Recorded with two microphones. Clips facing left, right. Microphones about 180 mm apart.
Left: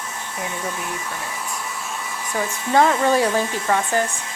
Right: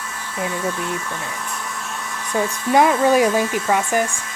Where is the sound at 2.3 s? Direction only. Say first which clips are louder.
Right 3 dB; 15° right (ahead or behind).